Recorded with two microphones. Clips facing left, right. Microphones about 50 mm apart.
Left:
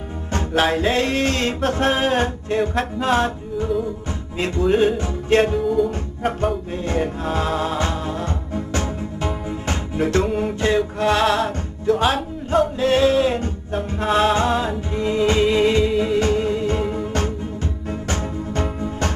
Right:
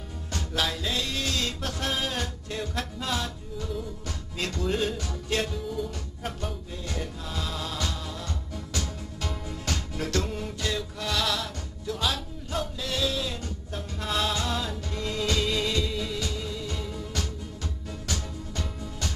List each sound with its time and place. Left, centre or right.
0.3 s music: left
5.6 s music: centre
5.9 s music: left